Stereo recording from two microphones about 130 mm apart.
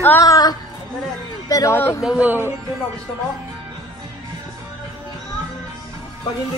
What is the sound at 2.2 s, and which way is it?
Speech, 15° right (ahead or behind).